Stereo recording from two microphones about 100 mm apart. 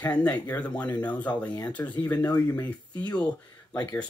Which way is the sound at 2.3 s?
35° left (ahead or behind).